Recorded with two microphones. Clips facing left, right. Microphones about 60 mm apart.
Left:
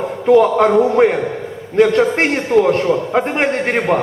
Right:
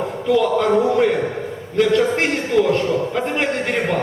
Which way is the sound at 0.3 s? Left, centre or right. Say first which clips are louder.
Left 6 dB; left.